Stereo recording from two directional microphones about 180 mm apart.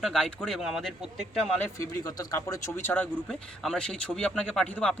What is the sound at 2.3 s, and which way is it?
A man's voice, 15° left (ahead or behind).